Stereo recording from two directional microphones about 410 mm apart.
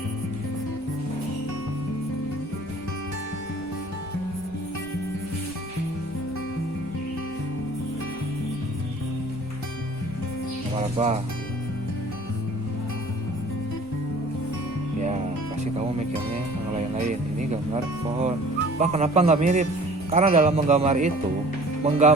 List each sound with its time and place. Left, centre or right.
10.8 s speech: centre
16.7 s speech: centre
18.8 s speech: centre